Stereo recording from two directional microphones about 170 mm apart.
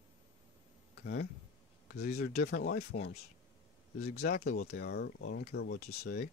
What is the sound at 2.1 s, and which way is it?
Speech, 65° left (ahead or behind).